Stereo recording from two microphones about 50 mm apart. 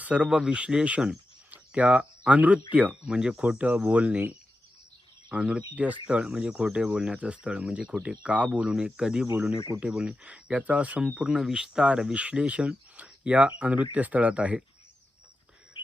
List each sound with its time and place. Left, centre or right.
0.0 s speech: right
5.3 s speech: right